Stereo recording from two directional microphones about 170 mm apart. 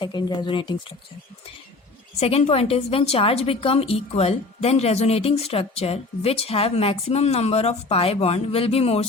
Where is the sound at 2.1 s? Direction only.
35° left (ahead or behind).